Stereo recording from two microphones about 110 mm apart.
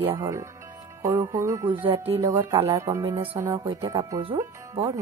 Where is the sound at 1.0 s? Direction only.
30° right (ahead or behind).